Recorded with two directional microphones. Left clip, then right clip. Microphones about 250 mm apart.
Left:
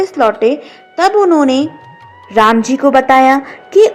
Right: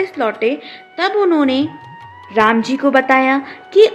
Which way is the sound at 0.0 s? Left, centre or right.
Centre.